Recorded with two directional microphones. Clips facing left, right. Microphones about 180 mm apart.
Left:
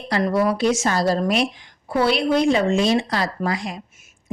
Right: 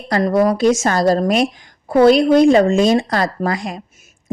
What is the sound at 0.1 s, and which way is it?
A woman's voice, 40° right (ahead or behind).